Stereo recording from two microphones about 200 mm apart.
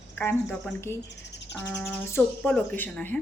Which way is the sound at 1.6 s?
10° left (ahead or behind).